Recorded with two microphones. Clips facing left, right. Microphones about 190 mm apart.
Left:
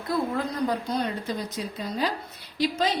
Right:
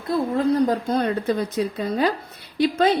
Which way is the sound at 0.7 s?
50° right (ahead or behind).